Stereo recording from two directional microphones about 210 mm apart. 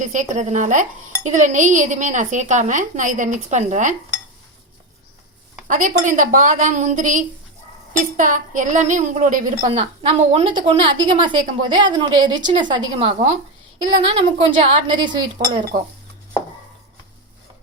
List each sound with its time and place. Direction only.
0.0 s dishes: 35° right (ahead or behind)
5.6 s dishes: 40° right (ahead or behind)
9.6 s a woman's voice: 30° right (ahead or behind)
15.4 s dishes: 35° right (ahead or behind)